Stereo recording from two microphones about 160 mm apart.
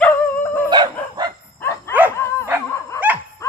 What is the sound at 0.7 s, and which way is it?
Dog, 25° right (ahead or behind).